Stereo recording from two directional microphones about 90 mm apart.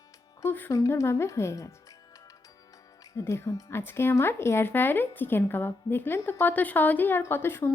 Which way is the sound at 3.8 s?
25° left (ahead or behind).